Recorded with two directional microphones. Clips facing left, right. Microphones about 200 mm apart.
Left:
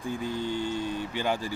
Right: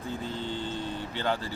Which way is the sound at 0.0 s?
15° left (ahead or behind).